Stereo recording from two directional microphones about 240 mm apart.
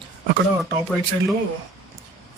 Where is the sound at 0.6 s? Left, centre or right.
Centre.